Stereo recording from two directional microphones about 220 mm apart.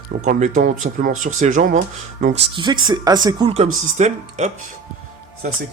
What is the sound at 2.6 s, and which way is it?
A man's voice, 20° right (ahead or behind).